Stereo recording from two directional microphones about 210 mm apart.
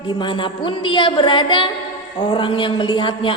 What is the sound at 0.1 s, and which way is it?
Music, 25° left (ahead or behind).